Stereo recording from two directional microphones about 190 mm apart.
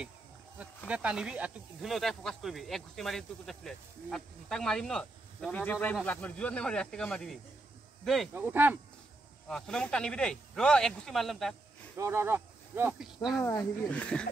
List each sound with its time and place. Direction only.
0.8 s speech: 5° right (ahead or behind)
8.4 s speech: 10° right (ahead or behind)
9.5 s speech: 5° left (ahead or behind)
12.0 s speech: 15° right (ahead or behind)
13.4 s speech: 10° left (ahead or behind)